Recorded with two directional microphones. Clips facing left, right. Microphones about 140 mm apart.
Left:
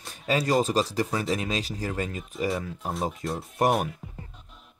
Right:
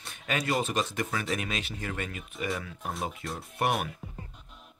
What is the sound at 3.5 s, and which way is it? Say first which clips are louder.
Speech: left 5 dB; 40° left (ahead or behind).